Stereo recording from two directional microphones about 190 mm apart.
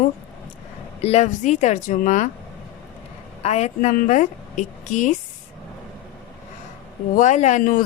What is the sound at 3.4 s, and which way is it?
Speech, 35° left (ahead or behind).